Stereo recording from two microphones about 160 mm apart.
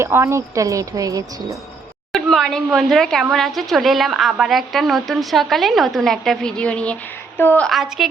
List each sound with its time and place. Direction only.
0.0 s a woman's voice: 15° right (ahead or behind)
2.1 s a woman's voice: centre (ahead or behind)
7.7 s speech: centre (ahead or behind)